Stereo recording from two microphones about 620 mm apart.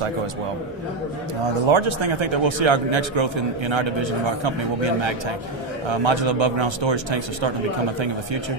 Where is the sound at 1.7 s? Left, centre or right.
Right.